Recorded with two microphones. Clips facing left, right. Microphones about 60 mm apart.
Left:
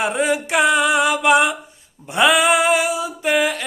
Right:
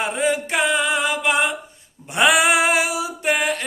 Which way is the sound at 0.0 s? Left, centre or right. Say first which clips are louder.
Left 3 dB; left.